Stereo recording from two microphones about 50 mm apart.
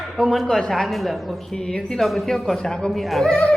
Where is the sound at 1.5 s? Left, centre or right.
Centre.